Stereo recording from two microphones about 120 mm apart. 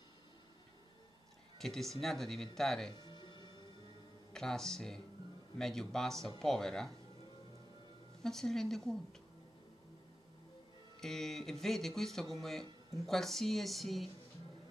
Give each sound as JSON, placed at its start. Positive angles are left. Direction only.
{"t": 1.6, "sound": "speech", "side_deg": 5}
{"t": 3.0, "sound": "music", "side_deg": 40}
{"t": 4.3, "sound": "speech", "side_deg": 5}
{"t": 8.2, "sound": "speech", "side_deg": 5}
{"t": 11.0, "sound": "speech", "side_deg": 5}